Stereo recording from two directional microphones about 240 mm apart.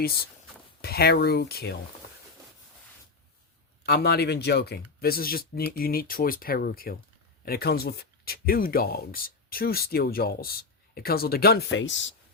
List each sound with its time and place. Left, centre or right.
0.8 s speech: left
3.8 s speech: left